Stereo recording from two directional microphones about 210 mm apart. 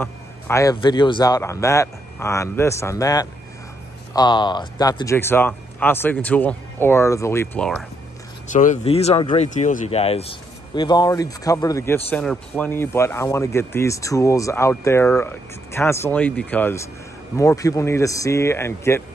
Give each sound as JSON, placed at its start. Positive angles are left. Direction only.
{"t": 0.0, "sound": "speech", "side_deg": 15}
{"t": 8.5, "sound": "speech", "side_deg": 35}